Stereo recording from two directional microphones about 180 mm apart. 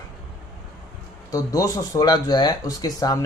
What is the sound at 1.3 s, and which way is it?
A man's voice, 20° left (ahead or behind).